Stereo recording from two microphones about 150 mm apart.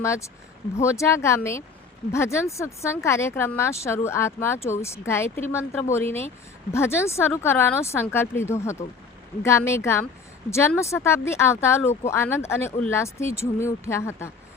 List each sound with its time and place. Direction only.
0.0 s speech: 20° left (ahead or behind)